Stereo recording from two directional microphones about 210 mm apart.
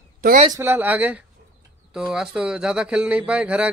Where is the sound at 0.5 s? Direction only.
10° right (ahead or behind).